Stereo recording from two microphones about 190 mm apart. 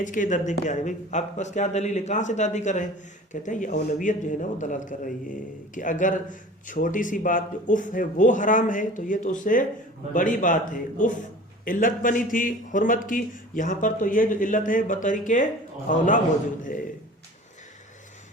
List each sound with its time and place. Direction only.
0.0 s a man's voice: 40° left (ahead or behind)